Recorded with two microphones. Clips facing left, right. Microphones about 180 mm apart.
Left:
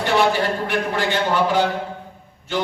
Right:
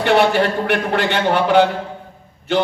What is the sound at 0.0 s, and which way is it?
A man's voice, 65° right (ahead or behind).